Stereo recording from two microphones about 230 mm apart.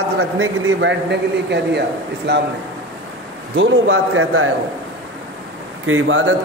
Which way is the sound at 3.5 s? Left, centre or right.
Right.